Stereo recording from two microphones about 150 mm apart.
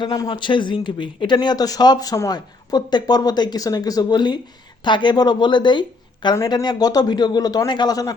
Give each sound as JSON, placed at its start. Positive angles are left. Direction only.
{"t": 0.0, "sound": "speech", "side_deg": 25}